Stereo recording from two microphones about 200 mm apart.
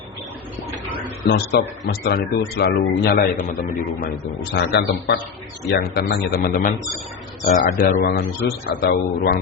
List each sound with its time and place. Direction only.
1.2 s a man's voice: 55° left (ahead or behind)
4.5 s a man's voice: 55° left (ahead or behind)